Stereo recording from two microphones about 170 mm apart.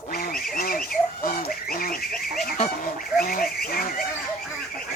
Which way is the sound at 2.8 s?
55° left (ahead or behind).